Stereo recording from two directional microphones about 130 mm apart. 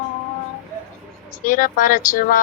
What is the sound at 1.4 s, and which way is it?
Child singing, 90° left.